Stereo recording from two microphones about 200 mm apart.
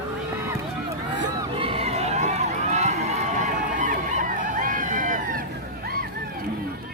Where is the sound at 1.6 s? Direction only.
30° right (ahead or behind).